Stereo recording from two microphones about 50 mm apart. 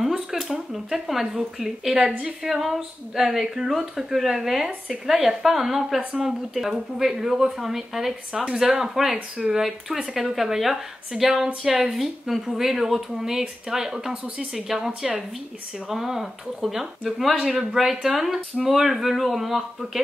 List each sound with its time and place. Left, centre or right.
0.0 s a sound: centre
0.5 s a woman's voice: centre
15.9 s a woman's voice: centre